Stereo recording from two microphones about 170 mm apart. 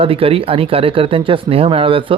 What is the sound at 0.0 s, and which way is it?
Speech, 35° right (ahead or behind).